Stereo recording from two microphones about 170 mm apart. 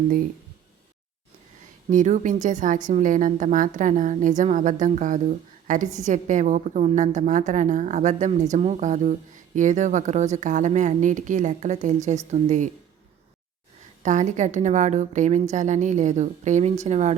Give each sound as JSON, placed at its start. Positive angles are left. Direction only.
{"t": 1.9, "sound": "a woman's voice", "side_deg": -45}
{"t": 14.0, "sound": "a woman's voice", "side_deg": -45}